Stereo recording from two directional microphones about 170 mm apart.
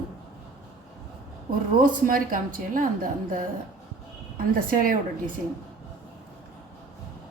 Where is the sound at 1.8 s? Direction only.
55° right (ahead or behind).